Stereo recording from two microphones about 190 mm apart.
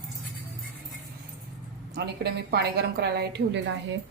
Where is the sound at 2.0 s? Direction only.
55° right (ahead or behind).